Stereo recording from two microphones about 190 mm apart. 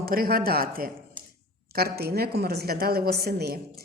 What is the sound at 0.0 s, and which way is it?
A woman's voice, 55° right (ahead or behind).